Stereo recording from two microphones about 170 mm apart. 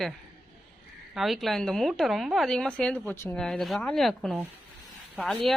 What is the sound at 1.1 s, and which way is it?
A woman's voice, centre (ahead or behind).